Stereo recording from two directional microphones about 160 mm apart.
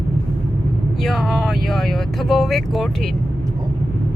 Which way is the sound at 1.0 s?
Centre (ahead or behind).